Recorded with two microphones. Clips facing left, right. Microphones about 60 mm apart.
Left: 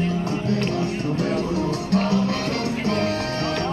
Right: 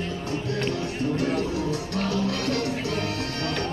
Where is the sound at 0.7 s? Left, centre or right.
Left.